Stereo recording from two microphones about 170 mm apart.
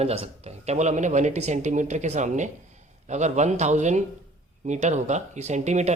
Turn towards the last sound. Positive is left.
turn(degrees=-40)  # may be behind; listen again after turning